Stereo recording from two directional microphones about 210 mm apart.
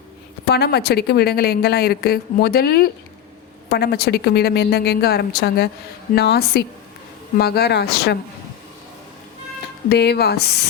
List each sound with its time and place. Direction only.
0.4 s speech: 50° left (ahead or behind)
9.9 s speech: 50° left (ahead or behind)